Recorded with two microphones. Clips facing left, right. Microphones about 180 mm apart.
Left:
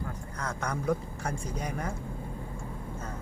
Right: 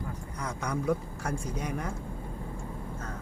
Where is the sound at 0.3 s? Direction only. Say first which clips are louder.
Left 1 dB; 15° right (ahead or behind).